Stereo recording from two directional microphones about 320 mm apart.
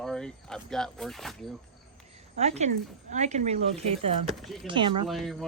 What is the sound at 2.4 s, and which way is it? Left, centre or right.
Speech, right.